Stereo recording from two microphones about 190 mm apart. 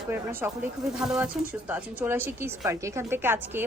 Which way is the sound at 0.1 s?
10° right (ahead or behind).